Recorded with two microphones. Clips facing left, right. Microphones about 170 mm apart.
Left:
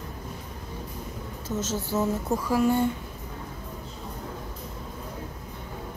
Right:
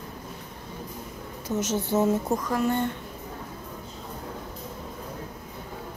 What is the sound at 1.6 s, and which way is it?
Speech, 20° right (ahead or behind).